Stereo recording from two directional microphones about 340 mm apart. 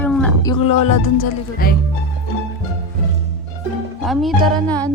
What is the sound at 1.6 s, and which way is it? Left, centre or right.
Speech, left.